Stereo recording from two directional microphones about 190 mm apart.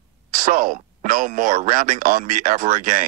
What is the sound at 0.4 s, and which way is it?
A man's voice, 45° right (ahead or behind).